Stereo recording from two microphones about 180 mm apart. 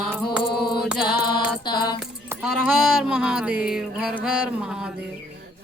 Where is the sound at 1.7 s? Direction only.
25° left (ahead or behind).